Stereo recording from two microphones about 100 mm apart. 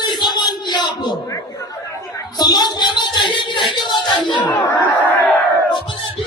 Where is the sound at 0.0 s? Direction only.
45° left (ahead or behind).